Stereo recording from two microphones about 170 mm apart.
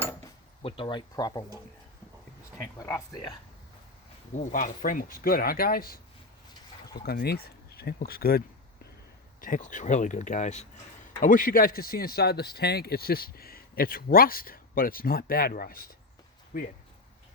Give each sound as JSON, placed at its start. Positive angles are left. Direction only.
{"t": 0.6, "sound": "speech", "side_deg": 30}
{"t": 2.7, "sound": "speech", "side_deg": 20}
{"t": 4.4, "sound": "speech", "side_deg": 50}
{"t": 9.4, "sound": "speech", "side_deg": 50}